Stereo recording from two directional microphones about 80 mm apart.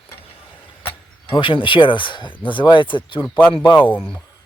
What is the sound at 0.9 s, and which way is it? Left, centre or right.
Speech, left.